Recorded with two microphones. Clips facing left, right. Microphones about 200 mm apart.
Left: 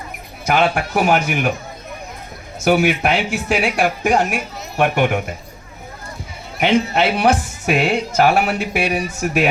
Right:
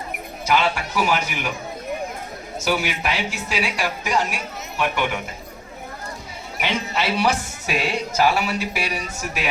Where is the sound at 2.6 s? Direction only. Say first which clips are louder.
Left 8 dB; 55° left (ahead or behind).